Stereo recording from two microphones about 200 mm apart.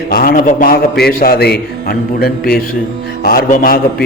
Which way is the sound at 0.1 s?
45° left (ahead or behind).